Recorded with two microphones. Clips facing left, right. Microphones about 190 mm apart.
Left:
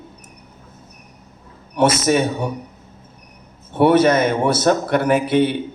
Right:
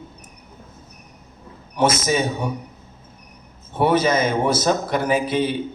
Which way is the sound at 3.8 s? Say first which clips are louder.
Left 4 dB; 65° left (ahead or behind).